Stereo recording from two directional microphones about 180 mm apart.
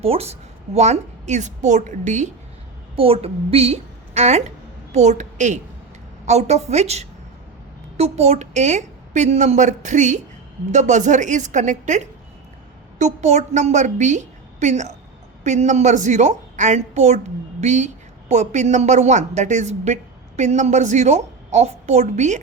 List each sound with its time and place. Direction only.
0.0 s a woman's voice: 35° right (ahead or behind)
2.9 s a woman's voice: 30° right (ahead or behind)